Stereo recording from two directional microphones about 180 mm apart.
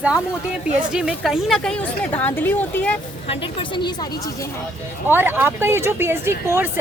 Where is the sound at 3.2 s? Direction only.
30° left (ahead or behind).